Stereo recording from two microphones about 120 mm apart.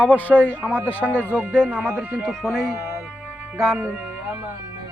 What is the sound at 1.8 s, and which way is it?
Speech, 20° right (ahead or behind).